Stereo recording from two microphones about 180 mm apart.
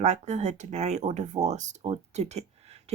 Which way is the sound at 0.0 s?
40° right (ahead or behind).